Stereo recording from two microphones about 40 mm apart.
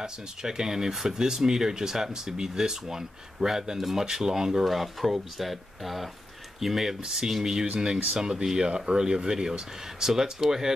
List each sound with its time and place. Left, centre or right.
0.0 s speech: centre